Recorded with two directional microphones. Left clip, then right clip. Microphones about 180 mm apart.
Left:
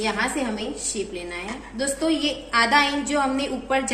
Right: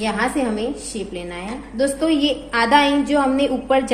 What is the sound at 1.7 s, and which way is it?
A woman's voice, 25° right (ahead or behind).